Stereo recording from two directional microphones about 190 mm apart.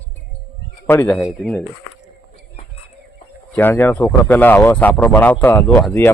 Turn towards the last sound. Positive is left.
turn(degrees=10)  # may be behind; listen again after turning